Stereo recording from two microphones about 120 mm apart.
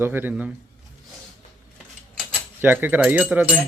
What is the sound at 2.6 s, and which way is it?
Speech, 15° right (ahead or behind).